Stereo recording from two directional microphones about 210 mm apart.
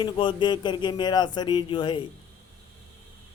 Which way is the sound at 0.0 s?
20° left (ahead or behind).